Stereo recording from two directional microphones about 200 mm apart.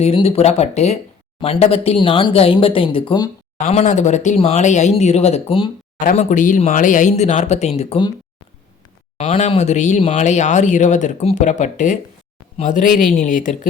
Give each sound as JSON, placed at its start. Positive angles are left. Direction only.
{"t": 0.0, "sound": "speech", "side_deg": 30}
{"t": 6.0, "sound": "speech", "side_deg": 40}
{"t": 9.1, "sound": "speech", "side_deg": 35}